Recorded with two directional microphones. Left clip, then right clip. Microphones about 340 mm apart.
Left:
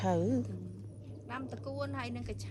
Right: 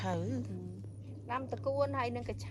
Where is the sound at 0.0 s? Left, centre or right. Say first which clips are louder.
Left 6 dB; centre.